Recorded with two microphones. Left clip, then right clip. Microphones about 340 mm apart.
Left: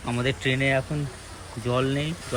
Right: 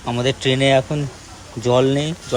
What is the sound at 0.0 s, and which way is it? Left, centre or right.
Speech, centre.